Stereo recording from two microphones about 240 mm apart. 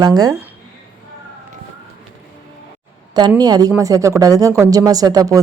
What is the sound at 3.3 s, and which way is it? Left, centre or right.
Speech, centre.